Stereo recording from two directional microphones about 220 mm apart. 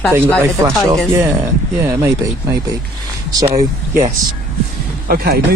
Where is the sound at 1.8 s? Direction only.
15° right (ahead or behind).